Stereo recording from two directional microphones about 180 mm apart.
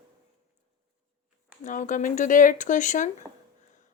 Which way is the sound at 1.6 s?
45° left (ahead or behind).